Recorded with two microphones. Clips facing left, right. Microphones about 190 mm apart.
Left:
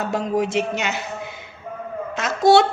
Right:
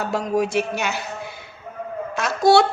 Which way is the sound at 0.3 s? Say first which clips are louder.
Right 1 dB; 20° left (ahead or behind).